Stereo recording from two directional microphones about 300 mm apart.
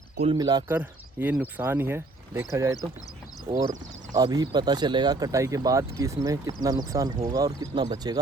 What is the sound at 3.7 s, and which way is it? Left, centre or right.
Speech, right.